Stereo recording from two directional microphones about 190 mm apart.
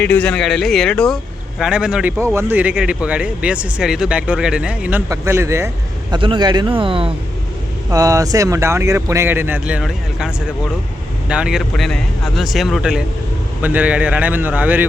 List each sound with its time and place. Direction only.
0.0 s speech: 5° left (ahead or behind); by 6.1 s 15° right (ahead or behind)
6.1 s speech: 25° right (ahead or behind)
7.9 s speech: 15° right (ahead or behind)